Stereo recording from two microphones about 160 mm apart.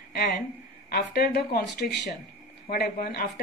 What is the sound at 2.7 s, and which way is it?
Speech, 80° left.